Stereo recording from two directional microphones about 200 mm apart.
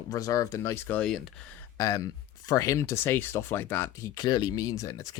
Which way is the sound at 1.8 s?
15° left (ahead or behind).